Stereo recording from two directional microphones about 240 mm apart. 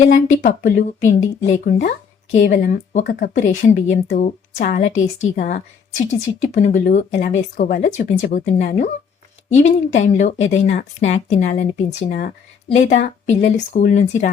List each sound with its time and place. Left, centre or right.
0.3 s a woman's voice: left